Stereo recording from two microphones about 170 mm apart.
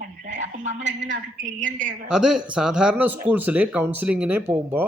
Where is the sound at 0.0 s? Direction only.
45° right (ahead or behind).